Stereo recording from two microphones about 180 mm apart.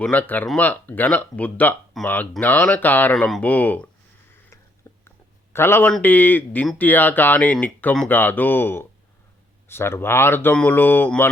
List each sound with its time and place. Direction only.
0.0 s speech: 10° left (ahead or behind)
4.3 s a sound: 10° left (ahead or behind)
5.5 s speech: 15° left (ahead or behind)